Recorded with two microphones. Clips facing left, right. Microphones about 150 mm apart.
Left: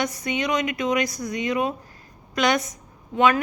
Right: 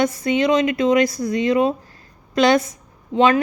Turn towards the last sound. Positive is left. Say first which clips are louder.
# right 4 dB
turn(degrees=-25)  # may be behind; listen again after turning